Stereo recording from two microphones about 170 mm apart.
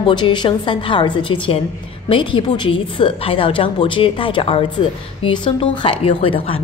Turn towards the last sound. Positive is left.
turn(degrees=30)  # may be behind; listen again after turning